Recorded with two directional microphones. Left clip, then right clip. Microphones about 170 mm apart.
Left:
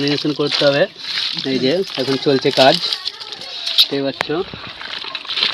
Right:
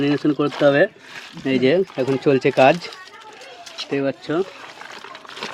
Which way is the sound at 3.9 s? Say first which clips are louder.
Left 1 dB; 20° right (ahead or behind).